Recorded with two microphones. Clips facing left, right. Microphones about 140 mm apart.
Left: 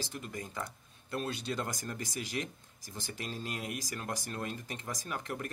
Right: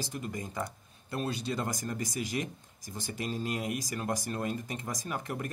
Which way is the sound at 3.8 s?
15° right (ahead or behind).